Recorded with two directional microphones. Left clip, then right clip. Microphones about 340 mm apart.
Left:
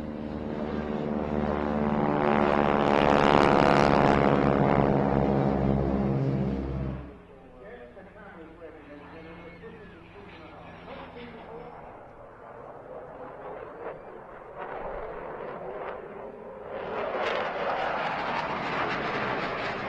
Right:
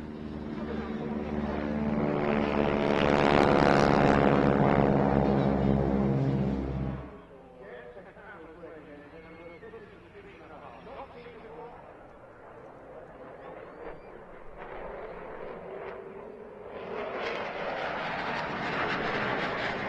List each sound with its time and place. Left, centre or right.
0.5 s vehicle: centre
0.8 s vehicle: left
1.1 s vehicle: centre
2.1 s vehicle: left; by 6.5 s centre
14.6 s a sound: left
16.7 s vehicle: left; by 19.9 s centre